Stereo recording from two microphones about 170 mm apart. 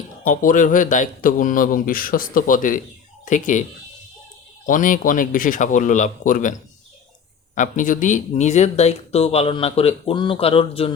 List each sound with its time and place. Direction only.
0.3 s speech: 50° left (ahead or behind)
4.6 s speech: 50° left (ahead or behind); by 10.9 s 30° left (ahead or behind)